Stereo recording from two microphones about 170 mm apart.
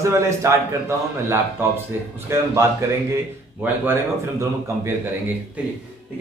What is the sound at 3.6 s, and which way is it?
A man's voice, 10° right (ahead or behind).